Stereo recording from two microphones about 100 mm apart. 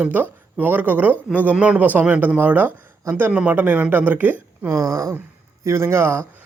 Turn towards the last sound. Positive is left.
turn(degrees=-25)  # may be behind; listen again after turning